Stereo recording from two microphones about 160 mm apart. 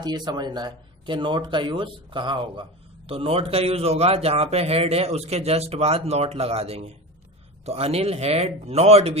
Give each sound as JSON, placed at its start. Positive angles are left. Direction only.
{"t": 0.0, "sound": "a man's voice", "side_deg": -25}